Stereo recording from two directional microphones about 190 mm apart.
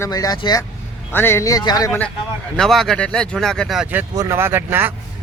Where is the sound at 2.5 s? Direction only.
Centre (ahead or behind).